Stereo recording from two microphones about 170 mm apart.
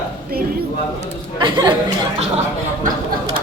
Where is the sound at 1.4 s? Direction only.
25° right (ahead or behind).